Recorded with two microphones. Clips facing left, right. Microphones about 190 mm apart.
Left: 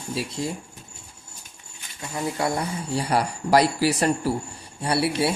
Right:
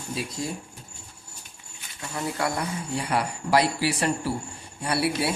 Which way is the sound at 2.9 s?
35° left (ahead or behind).